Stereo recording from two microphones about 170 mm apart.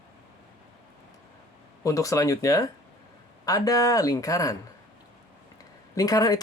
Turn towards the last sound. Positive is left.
turn(degrees=20)  # may be behind; listen again after turning